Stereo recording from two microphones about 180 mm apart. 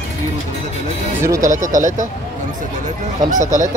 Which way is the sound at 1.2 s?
20° right (ahead or behind).